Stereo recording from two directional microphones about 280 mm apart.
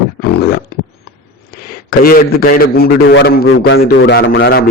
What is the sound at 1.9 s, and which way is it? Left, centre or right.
A man's voice, left.